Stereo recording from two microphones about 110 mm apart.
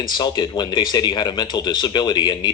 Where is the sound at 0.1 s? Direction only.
40° left (ahead or behind).